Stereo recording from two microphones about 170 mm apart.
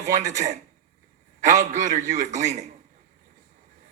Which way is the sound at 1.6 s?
45° right (ahead or behind).